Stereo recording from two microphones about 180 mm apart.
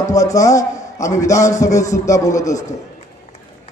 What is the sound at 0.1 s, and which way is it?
A man's voice, 20° left (ahead or behind).